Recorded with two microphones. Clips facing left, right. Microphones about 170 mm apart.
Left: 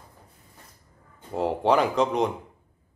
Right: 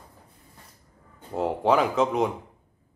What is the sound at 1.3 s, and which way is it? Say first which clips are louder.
Speech: even; centre (ahead or behind).